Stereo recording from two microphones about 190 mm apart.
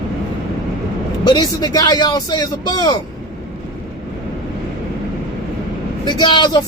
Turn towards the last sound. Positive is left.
turn(degrees=25)  # may be behind; listen again after turning